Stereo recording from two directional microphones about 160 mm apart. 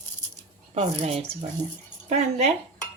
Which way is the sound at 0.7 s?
40° right (ahead or behind).